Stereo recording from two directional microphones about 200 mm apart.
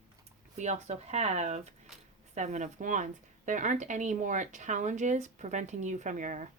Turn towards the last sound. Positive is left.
turn(degrees=-35)  # may be behind; listen again after turning